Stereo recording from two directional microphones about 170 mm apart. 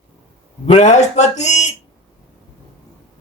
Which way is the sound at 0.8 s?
45° left (ahead or behind).